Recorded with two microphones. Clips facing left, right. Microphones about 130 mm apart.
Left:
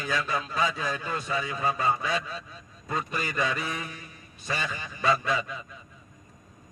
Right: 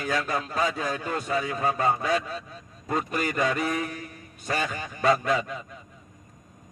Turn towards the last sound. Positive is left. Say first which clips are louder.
# right 3 dB
turn(degrees=-50)  # may be behind; listen again after turning